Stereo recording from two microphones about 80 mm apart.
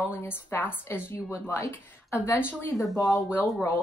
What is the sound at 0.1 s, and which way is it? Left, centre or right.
Speech, left.